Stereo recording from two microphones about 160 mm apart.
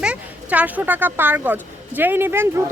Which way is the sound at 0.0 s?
10° right (ahead or behind).